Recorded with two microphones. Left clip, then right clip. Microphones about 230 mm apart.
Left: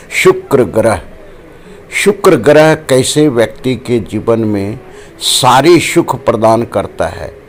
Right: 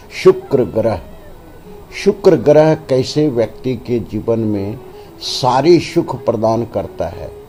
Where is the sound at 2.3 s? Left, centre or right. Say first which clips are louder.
Left 3 dB; centre.